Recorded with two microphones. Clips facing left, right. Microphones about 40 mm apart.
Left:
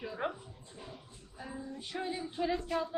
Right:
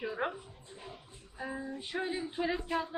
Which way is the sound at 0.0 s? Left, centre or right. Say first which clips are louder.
Right 2 dB; centre.